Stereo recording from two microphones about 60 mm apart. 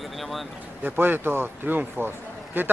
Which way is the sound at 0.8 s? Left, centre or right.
Right.